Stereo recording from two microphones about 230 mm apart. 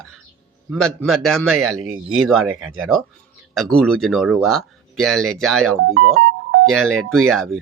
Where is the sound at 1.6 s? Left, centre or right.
Right.